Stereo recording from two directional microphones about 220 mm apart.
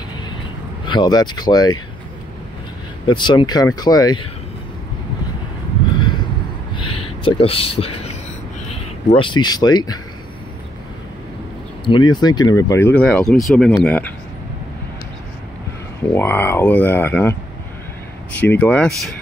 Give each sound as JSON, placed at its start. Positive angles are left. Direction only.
{"t": 0.8, "sound": "speech", "side_deg": 20}
{"t": 3.1, "sound": "speech", "side_deg": 20}
{"t": 6.7, "sound": "a sound", "side_deg": 25}
{"t": 8.6, "sound": "speech", "side_deg": 25}
{"t": 11.8, "sound": "speech", "side_deg": 20}
{"t": 16.2, "sound": "speech", "side_deg": 10}
{"t": 18.4, "sound": "speech", "side_deg": 5}